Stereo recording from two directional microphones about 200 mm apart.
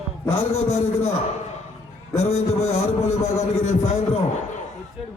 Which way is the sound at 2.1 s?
35° left (ahead or behind).